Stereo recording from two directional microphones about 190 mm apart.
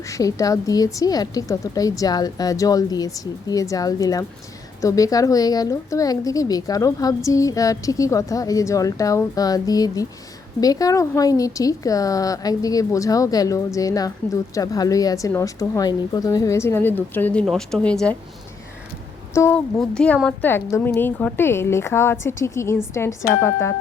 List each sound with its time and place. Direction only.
0.1 s a woman's voice: 15° left (ahead or behind)
19.3 s a woman's voice: 10° left (ahead or behind)